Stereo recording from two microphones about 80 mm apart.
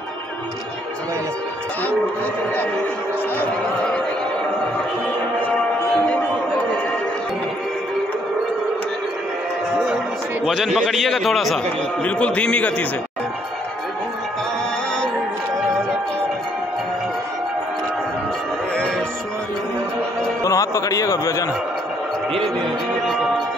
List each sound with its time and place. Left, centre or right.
10.4 s a man's voice: centre
12.0 s a man's voice: centre
20.4 s a sound: left